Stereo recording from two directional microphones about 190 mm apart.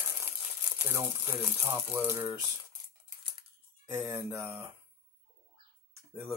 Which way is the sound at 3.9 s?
20° right (ahead or behind).